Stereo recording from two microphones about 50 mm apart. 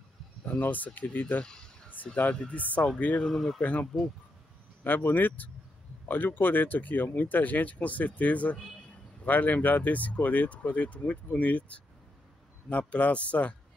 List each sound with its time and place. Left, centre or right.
0.5 s speech: left
2.0 s a sound: left
2.4 s speech: left
3.3 s speech: centre
4.8 s speech: left